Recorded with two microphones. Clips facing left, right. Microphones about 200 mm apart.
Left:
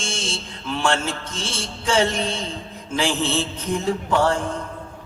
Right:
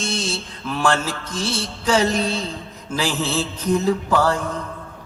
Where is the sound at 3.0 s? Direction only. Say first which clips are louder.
Even; 30° left (ahead or behind).